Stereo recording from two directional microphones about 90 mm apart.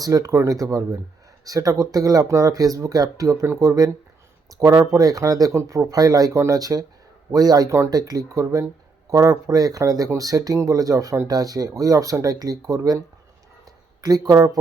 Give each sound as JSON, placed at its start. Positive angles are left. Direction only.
{"t": 0.0, "sound": "speech", "side_deg": -40}
{"t": 14.0, "sound": "speech", "side_deg": -45}